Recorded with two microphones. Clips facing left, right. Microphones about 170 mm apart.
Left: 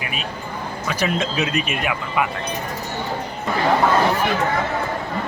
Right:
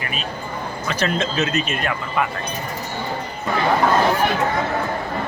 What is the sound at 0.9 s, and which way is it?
Speech, 10° left (ahead or behind).